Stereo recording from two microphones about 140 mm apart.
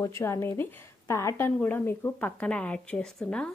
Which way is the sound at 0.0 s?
20° left (ahead or behind).